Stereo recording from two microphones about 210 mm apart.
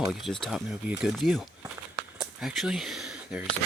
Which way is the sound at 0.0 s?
Centre (ahead or behind).